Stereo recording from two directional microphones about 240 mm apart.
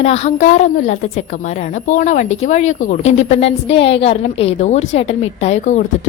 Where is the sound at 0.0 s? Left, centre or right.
Left.